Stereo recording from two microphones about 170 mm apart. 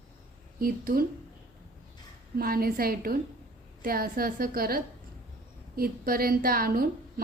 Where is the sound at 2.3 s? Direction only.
60° right (ahead or behind).